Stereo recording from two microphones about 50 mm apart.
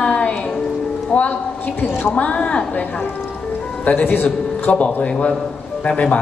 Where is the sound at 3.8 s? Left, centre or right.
Left.